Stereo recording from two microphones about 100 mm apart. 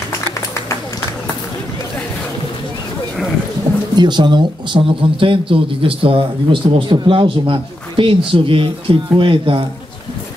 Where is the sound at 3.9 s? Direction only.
45° right (ahead or behind).